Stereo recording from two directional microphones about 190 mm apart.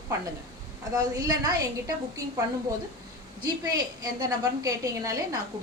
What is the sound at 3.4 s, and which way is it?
A woman's voice, 20° right (ahead or behind).